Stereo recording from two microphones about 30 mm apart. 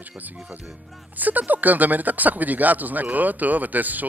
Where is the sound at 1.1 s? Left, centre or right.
Right.